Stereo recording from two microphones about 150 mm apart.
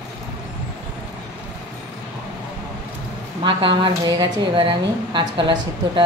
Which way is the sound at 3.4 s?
35° right (ahead or behind).